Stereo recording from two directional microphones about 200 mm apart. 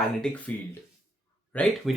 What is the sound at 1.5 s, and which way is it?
Speech, 5° left (ahead or behind).